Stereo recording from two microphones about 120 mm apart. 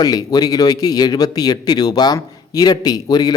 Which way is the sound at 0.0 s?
35° left (ahead or behind).